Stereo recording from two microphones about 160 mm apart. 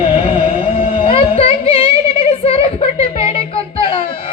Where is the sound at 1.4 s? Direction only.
35° left (ahead or behind).